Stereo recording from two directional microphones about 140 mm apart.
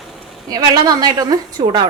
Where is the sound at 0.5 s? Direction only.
30° right (ahead or behind).